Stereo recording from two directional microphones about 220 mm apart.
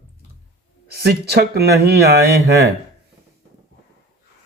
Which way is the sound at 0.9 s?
45° right (ahead or behind).